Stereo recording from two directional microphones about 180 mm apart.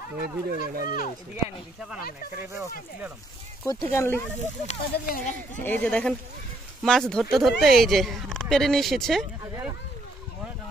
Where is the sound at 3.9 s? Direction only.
15° left (ahead or behind).